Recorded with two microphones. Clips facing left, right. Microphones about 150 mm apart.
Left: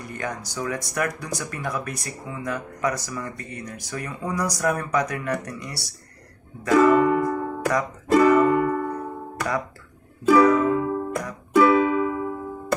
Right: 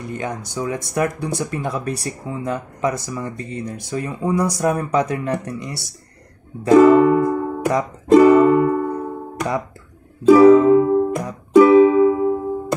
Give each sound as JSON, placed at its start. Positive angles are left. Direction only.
{"t": 0.0, "sound": "speech", "side_deg": -20}
{"t": 6.6, "sound": "music", "side_deg": -25}
{"t": 10.2, "sound": "music", "side_deg": -25}